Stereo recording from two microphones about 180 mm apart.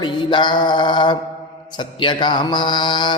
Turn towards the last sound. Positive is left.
turn(degrees=25)  # may be behind; listen again after turning